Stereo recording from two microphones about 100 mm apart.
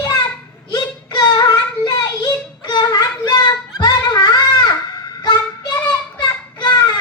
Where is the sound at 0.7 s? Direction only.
45° left (ahead or behind).